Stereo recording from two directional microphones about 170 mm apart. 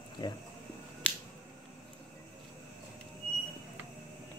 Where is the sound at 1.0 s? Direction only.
5° left (ahead or behind).